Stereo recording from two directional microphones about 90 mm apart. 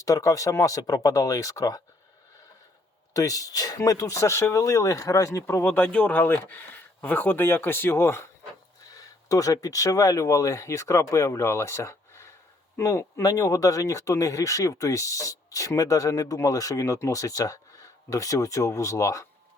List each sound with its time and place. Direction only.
0.0 s speech: 40° left (ahead or behind)
3.1 s speech: 40° left (ahead or behind)
5.6 s speech: 20° left (ahead or behind)
9.0 s speech: 40° left (ahead or behind)